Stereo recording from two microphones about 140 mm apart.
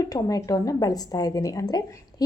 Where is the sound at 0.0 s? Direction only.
25° left (ahead or behind).